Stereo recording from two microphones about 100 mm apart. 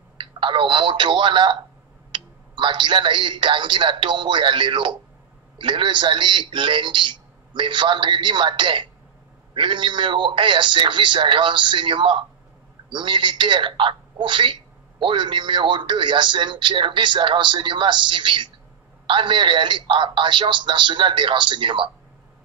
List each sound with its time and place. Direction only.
0.2 s a man's voice: 60° right (ahead or behind)